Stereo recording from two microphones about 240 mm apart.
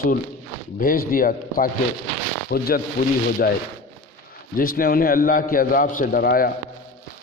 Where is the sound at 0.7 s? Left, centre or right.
Left.